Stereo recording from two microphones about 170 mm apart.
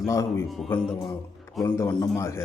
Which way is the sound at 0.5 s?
Centre (ahead or behind).